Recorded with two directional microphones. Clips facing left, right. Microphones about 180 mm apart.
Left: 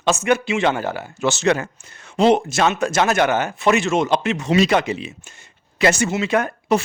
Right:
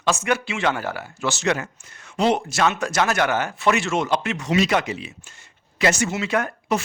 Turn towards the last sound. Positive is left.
turn(degrees=25)  # may be behind; listen again after turning